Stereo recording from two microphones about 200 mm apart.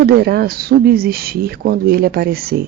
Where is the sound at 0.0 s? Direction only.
50° right (ahead or behind).